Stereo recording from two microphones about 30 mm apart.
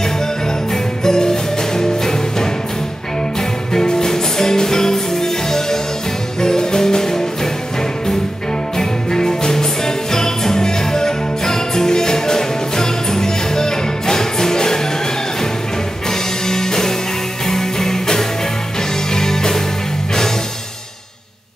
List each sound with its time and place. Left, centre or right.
1.0 s music: left
3.7 s music: left
8.7 s music: centre
16.1 s music: centre